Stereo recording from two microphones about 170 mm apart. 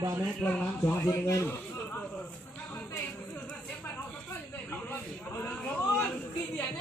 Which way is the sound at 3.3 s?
10° left (ahead or behind).